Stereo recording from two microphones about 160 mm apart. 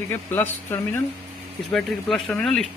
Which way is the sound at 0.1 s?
15° left (ahead or behind).